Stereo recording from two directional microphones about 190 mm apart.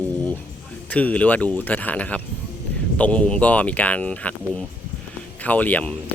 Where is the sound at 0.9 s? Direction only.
5° left (ahead or behind).